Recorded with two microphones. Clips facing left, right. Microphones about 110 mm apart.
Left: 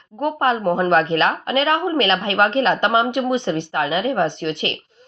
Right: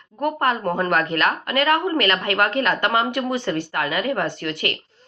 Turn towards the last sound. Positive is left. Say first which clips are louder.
# left 3 dB
turn(degrees=25)  # may be behind; listen again after turning